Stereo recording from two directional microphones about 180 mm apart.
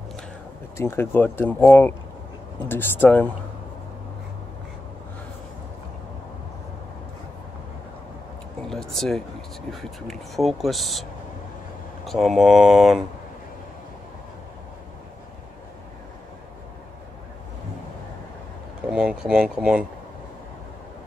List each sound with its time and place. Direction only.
0.7 s speech: 15° left (ahead or behind)
8.6 s a sound: 5° left (ahead or behind)
9.7 s speech: centre (ahead or behind)
18.9 s speech: 5° right (ahead or behind)